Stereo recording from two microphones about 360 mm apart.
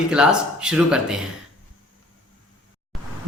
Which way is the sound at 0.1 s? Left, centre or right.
Centre.